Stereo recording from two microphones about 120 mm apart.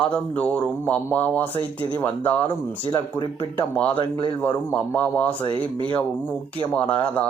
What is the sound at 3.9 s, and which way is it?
Speech, 40° left (ahead or behind).